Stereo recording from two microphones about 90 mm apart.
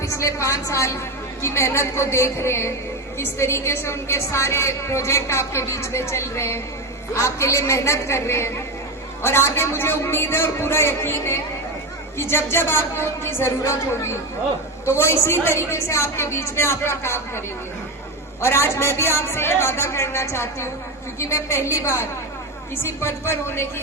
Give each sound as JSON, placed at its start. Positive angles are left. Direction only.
{"t": 0.0, "sound": "a woman's voice", "side_deg": 35}